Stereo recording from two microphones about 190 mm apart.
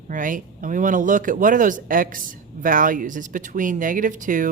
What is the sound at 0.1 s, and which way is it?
Speech, 45° right (ahead or behind).